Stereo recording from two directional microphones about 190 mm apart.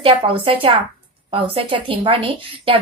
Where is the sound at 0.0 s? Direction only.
30° right (ahead or behind).